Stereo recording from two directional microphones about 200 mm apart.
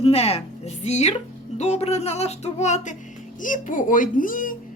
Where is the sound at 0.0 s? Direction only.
30° left (ahead or behind).